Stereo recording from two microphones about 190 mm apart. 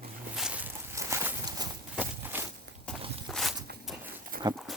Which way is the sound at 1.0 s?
15° right (ahead or behind).